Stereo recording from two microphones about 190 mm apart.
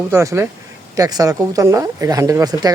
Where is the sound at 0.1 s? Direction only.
15° right (ahead or behind).